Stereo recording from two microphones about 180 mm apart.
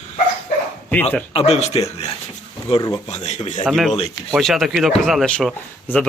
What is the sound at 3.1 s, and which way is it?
Speech, 40° left (ahead or behind).